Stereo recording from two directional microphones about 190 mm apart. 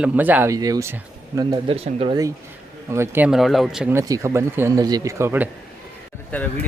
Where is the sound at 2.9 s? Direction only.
10° right (ahead or behind).